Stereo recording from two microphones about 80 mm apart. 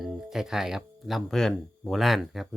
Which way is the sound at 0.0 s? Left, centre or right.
Centre.